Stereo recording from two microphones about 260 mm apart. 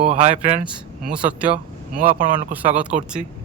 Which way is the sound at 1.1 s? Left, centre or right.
Centre.